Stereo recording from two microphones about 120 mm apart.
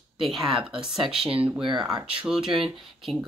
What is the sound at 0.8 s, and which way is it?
Speech, 45° right (ahead or behind).